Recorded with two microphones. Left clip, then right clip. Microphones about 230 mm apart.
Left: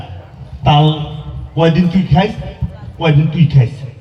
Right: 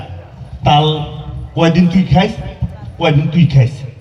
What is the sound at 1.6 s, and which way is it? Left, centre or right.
Music, right.